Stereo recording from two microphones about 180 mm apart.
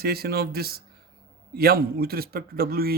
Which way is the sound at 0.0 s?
60° right (ahead or behind).